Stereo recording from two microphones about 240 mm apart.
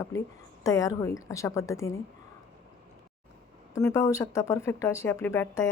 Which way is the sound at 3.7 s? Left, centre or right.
Centre.